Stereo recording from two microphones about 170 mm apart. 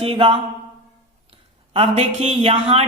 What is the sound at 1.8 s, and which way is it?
Speech, 35° right (ahead or behind).